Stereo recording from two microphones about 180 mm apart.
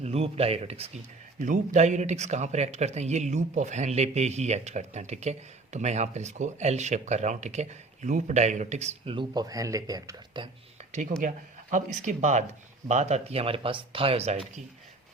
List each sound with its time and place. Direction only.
0.0 s speech: 35° right (ahead or behind)
1.4 s speech: 45° right (ahead or behind); by 10.8 s 25° right (ahead or behind)
11.2 s speech: 45° right (ahead or behind)